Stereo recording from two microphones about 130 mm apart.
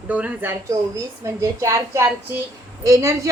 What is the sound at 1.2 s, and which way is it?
A woman's voice, 25° right (ahead or behind).